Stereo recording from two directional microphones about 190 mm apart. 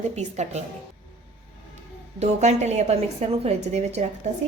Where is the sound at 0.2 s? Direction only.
35° right (ahead or behind).